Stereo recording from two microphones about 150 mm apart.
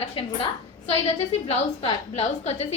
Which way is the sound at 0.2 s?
40° left (ahead or behind).